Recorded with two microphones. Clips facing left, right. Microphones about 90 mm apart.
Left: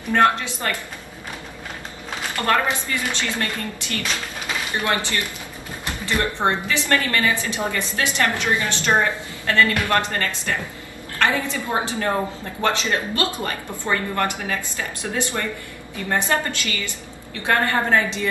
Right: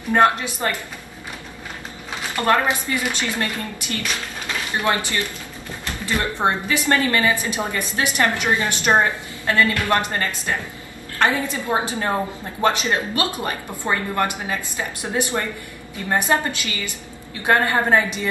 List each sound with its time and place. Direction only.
0.1 s speech: 20° right (ahead or behind)
2.3 s a woman's voice: 20° right (ahead or behind)